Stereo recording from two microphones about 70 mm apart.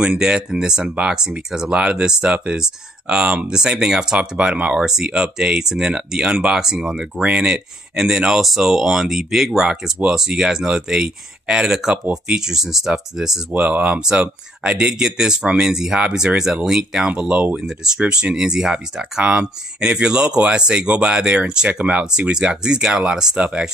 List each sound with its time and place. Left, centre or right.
0.0 s speech: centre
13.5 s speech: centre
17.1 s speech: centre